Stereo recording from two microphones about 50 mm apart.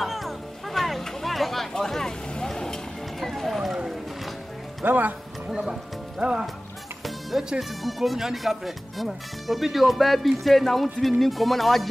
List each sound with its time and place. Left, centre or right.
0.0 s music: centre
3.2 s run: centre
4.8 s speech: right
5.5 s music: centre
7.3 s speech: centre